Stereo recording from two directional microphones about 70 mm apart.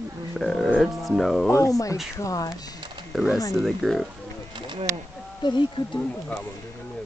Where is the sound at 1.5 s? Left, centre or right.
Left.